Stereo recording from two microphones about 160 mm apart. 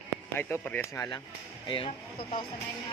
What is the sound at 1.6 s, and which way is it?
Speech, 35° left (ahead or behind).